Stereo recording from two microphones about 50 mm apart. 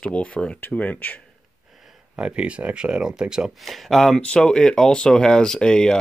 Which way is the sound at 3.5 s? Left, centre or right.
Centre.